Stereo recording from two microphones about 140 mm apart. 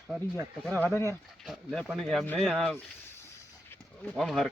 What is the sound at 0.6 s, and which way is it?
Speech, 10° left (ahead or behind).